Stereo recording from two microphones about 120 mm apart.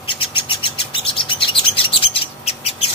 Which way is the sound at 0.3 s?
45° left (ahead or behind).